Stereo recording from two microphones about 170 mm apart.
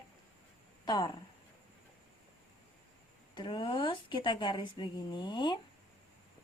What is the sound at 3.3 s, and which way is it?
A woman's voice, 30° left (ahead or behind).